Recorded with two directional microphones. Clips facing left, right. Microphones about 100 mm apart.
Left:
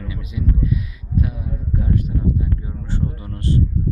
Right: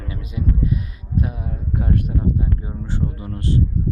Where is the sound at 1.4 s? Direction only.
60° right (ahead or behind).